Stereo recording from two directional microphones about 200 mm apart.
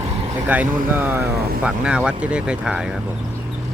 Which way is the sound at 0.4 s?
10° right (ahead or behind).